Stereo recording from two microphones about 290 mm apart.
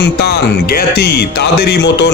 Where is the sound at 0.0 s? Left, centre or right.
Left.